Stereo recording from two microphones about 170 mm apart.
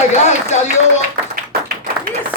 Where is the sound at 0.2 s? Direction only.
40° left (ahead or behind).